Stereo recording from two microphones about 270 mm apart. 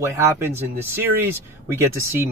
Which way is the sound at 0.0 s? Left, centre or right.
Centre.